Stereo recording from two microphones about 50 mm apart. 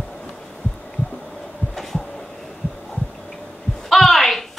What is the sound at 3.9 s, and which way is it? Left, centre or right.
Speech, centre.